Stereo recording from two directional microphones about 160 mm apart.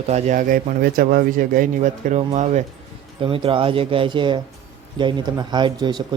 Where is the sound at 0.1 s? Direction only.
50° right (ahead or behind).